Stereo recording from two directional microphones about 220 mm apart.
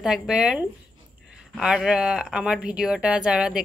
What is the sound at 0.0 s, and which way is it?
Speech, 5° right (ahead or behind).